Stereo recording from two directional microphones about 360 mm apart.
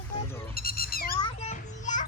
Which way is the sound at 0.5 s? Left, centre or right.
Left.